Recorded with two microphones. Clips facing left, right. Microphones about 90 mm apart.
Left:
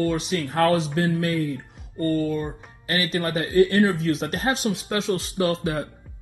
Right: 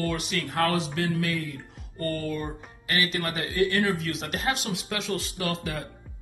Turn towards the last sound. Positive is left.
turn(degrees=30)  # may be behind; listen again after turning